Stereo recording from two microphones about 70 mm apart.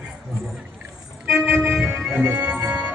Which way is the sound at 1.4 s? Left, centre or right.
Right.